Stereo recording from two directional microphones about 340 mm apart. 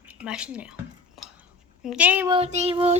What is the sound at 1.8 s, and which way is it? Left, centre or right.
A child's voice, centre.